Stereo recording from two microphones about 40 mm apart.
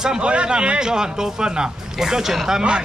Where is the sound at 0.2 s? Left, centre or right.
Right; by 2.6 s centre.